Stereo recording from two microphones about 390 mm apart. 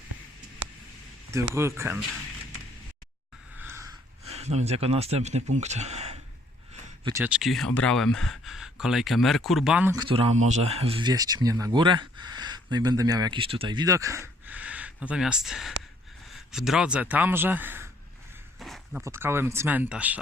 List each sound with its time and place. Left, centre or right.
1.3 s speech: centre
3.6 s a sound: centre
4.3 s speech: centre